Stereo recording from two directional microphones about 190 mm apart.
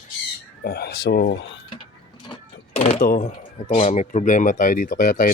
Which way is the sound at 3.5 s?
30° left (ahead or behind).